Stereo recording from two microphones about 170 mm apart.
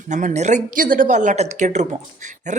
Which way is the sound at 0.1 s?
45° right (ahead or behind).